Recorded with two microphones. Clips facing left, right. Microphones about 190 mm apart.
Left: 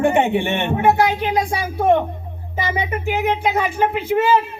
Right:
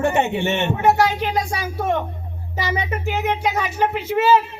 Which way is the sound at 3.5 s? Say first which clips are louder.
Left 2 dB; 55° left (ahead or behind).